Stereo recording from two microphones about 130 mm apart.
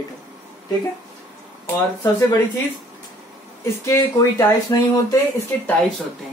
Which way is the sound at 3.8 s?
20° left (ahead or behind).